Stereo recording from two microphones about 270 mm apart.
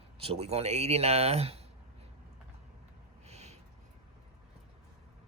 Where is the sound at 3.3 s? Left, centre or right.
Right.